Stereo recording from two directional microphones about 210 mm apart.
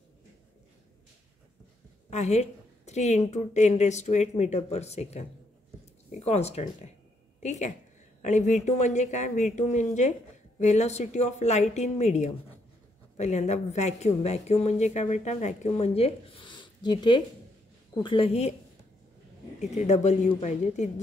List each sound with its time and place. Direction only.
2.0 s a woman's voice: 30° left (ahead or behind)
19.6 s a woman's voice: 35° left (ahead or behind)